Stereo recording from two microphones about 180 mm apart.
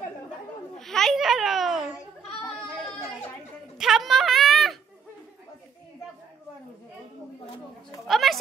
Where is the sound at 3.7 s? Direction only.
Centre (ahead or behind).